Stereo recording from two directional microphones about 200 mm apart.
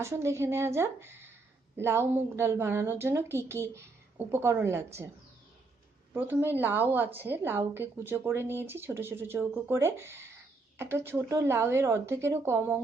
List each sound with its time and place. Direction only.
0.0 s a woman's voice: 15° right (ahead or behind)
6.1 s a woman's voice: 10° right (ahead or behind)